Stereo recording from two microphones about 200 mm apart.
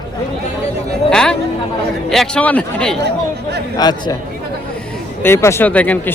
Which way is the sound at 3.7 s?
20° left (ahead or behind).